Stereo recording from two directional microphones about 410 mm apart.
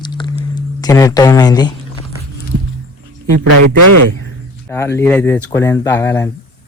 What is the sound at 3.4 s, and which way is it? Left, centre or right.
Speech, right.